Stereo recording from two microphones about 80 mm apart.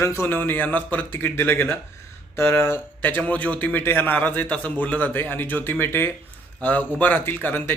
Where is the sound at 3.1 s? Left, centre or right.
Centre.